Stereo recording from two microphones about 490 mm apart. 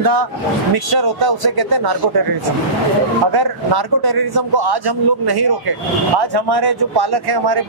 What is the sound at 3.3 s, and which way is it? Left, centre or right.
Speech, right.